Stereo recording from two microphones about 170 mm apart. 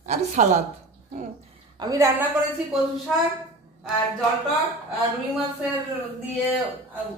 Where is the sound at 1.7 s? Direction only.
20° right (ahead or behind).